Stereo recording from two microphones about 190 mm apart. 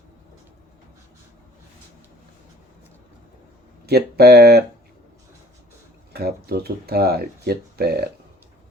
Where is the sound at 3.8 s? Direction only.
55° right (ahead or behind).